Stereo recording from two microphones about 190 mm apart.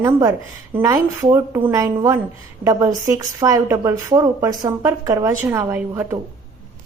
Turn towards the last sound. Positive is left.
turn(degrees=-10)  # may be behind; listen again after turning